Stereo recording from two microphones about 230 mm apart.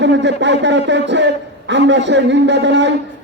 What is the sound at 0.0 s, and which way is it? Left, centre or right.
A man's voice, right.